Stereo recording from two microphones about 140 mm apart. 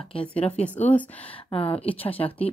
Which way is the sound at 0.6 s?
10° left (ahead or behind).